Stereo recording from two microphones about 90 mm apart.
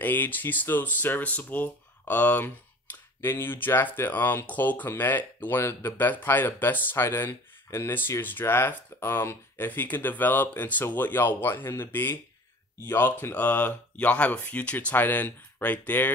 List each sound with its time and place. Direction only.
0.0 s speech: 20° left (ahead or behind)